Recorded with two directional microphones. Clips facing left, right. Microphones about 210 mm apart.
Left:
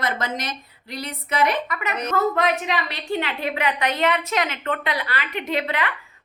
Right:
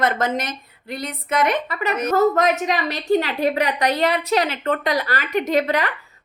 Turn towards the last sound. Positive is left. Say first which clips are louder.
# right 5 dB
turn(degrees=-40)  # may be behind; listen again after turning